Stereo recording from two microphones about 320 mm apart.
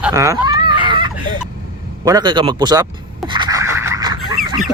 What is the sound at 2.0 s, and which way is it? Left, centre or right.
Speech, centre.